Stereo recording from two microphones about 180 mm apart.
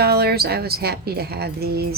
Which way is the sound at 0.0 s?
60° right (ahead or behind).